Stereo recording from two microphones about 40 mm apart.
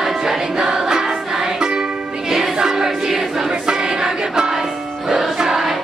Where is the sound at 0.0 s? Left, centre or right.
Centre.